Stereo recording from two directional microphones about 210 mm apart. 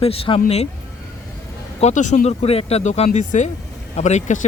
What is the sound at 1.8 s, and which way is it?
Speech, 35° left (ahead or behind).